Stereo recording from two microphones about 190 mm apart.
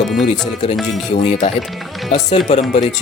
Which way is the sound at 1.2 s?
35° left (ahead or behind).